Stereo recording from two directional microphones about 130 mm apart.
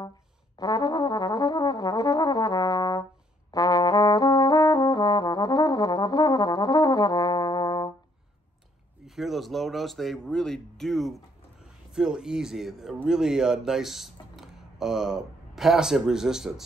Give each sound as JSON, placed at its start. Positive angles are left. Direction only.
{"t": 0.6, "sound": "brass instrument", "side_deg": 30}
{"t": 9.0, "sound": "speech", "side_deg": 0}